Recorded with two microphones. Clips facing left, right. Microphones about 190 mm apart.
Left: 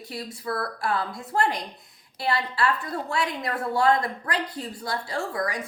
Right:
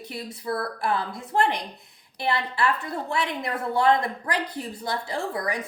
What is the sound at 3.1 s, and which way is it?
A woman's voice, 25° right (ahead or behind).